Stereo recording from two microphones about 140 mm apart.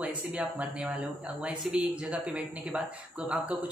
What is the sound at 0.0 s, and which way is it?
Speech, 10° right (ahead or behind).